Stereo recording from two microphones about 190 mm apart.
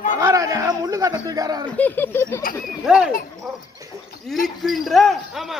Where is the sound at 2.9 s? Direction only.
5° right (ahead or behind).